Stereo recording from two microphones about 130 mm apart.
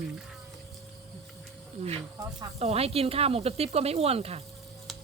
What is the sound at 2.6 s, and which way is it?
Speech, 50° right (ahead or behind).